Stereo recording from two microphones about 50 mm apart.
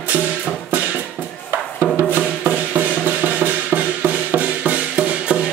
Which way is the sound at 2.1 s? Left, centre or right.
Right.